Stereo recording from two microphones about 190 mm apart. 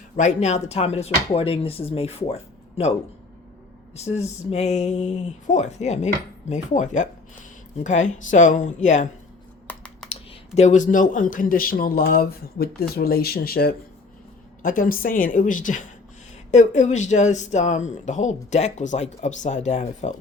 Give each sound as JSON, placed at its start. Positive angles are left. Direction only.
{"t": 0.2, "sound": "speech", "side_deg": 40}
{"t": 3.9, "sound": "speech", "side_deg": 35}
{"t": 9.6, "sound": "computer keyboard", "side_deg": 5}
{"t": 10.1, "sound": "speech", "side_deg": 35}